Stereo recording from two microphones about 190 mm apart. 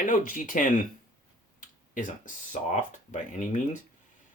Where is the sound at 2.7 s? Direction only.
40° left (ahead or behind).